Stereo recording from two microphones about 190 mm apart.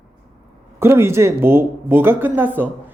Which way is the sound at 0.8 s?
15° right (ahead or behind).